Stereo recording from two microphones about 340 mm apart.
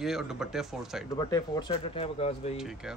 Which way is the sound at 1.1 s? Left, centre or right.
Centre.